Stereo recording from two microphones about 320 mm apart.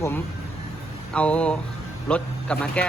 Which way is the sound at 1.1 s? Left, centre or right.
Centre.